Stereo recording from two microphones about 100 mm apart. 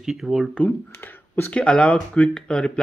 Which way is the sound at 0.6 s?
15° left (ahead or behind).